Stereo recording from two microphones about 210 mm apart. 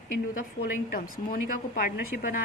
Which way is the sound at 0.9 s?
45° left (ahead or behind).